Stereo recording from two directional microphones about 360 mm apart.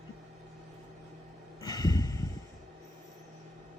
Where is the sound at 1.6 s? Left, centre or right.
Centre.